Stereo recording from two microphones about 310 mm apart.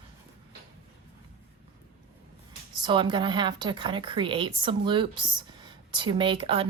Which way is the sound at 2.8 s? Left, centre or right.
Centre.